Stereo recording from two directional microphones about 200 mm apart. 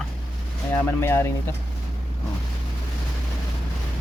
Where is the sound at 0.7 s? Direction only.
10° left (ahead or behind).